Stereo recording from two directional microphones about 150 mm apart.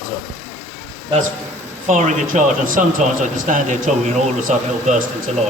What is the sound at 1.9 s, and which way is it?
Speech, 55° right (ahead or behind).